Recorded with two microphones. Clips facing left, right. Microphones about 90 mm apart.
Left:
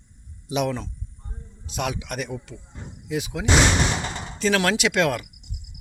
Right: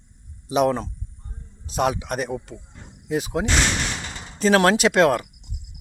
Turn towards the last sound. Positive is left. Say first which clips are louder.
# right 5 dB
turn(degrees=-35)  # may be behind; listen again after turning